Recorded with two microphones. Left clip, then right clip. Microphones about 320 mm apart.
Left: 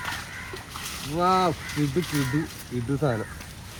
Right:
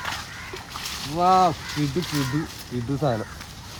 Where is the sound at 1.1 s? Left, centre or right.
Centre.